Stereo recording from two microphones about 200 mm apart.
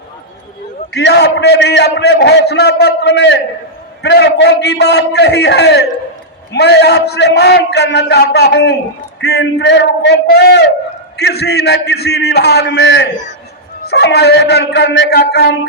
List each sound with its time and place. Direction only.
0.9 s a man's voice: 55° left (ahead or behind)